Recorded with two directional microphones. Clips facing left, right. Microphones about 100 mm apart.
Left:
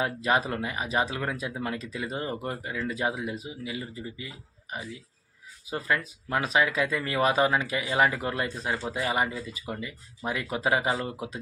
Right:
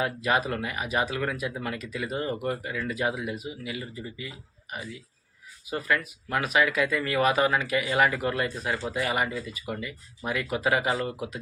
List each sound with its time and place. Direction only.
0.0 s speech: 30° left (ahead or behind)